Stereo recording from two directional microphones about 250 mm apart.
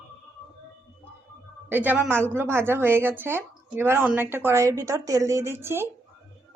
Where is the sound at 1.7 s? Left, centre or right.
Centre.